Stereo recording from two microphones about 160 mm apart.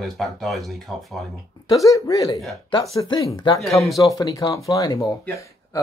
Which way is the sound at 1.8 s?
20° left (ahead or behind).